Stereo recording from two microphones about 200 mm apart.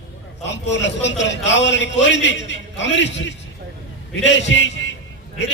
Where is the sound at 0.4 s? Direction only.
60° left (ahead or behind).